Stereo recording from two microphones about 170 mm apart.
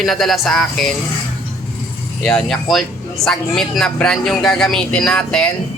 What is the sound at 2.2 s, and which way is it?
Speech, centre (ahead or behind).